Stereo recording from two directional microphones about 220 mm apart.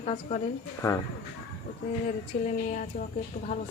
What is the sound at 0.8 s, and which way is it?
Speech, 15° left (ahead or behind).